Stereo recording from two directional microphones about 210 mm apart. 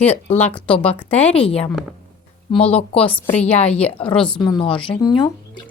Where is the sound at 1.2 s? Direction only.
25° left (ahead or behind).